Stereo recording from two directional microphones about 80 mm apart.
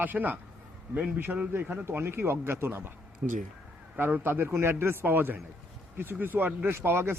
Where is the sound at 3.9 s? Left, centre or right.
Right.